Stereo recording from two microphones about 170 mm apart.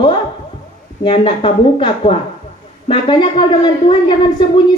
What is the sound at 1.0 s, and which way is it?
Speech, 30° left (ahead or behind).